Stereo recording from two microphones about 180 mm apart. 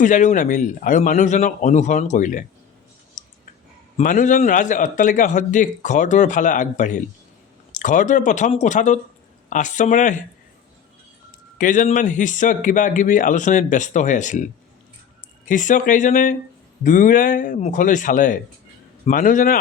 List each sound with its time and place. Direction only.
0.0 s a man's voice: 45° left (ahead or behind)
3.2 s a sound: 45° left (ahead or behind)
3.9 s a man's voice: 45° left (ahead or behind)
11.5 s a man's voice: 45° left (ahead or behind)
15.4 s a man's voice: 45° left (ahead or behind)